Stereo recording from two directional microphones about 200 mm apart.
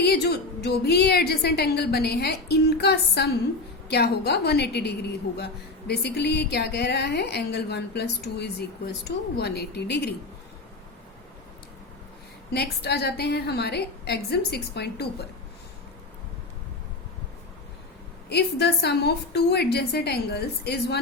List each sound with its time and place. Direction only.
0.0 s a woman's voice: 55° left (ahead or behind)
12.5 s a woman's voice: 55° left (ahead or behind)
18.3 s a woman's voice: 55° left (ahead or behind)